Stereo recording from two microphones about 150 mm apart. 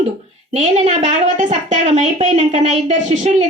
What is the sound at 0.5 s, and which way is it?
A woman's voice, 45° right (ahead or behind).